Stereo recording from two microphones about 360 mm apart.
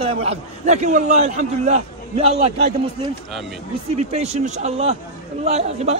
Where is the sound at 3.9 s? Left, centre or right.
Centre.